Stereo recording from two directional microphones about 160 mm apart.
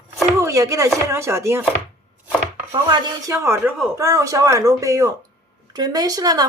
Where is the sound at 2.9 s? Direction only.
20° right (ahead or behind).